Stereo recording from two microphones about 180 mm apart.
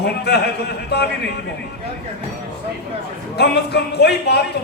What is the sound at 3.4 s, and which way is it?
A man's voice, 65° left (ahead or behind).